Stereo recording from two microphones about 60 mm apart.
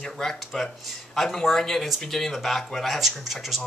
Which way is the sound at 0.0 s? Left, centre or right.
Centre.